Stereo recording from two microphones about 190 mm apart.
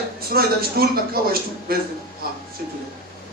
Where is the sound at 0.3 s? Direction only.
55° right (ahead or behind).